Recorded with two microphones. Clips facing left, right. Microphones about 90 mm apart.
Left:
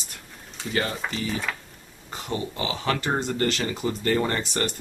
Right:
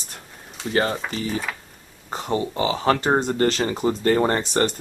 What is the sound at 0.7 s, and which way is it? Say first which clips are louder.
Speech: right 5 dB; 35° right (ahead or behind).